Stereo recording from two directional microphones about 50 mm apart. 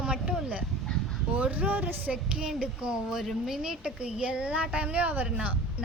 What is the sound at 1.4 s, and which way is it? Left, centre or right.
A woman's voice, right.